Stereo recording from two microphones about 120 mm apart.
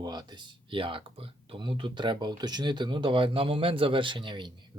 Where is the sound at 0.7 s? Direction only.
45° right (ahead or behind).